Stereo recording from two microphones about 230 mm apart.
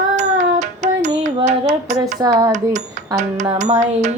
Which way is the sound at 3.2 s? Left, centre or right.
Right.